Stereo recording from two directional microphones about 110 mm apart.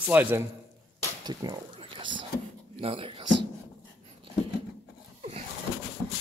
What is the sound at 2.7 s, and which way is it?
Speech, 55° right (ahead or behind).